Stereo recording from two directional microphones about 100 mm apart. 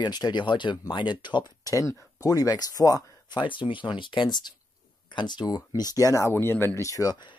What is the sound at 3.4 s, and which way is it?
Speech, 55° left (ahead or behind).